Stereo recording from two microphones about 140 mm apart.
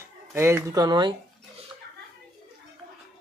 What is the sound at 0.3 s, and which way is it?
Speech, 20° right (ahead or behind).